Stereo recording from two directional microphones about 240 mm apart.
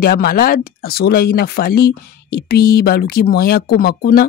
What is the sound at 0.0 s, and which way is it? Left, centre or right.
Speech, left.